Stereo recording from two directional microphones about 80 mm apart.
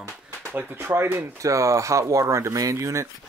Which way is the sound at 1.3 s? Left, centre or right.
Right.